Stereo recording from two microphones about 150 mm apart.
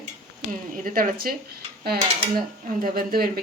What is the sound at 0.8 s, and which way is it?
Speech, 75° right (ahead or behind).